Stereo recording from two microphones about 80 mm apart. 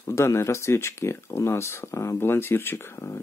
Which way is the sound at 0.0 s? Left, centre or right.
Left.